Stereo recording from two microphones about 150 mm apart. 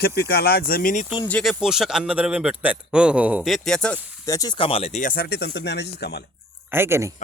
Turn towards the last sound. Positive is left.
turn(degrees=-15)  # may be behind; listen again after turning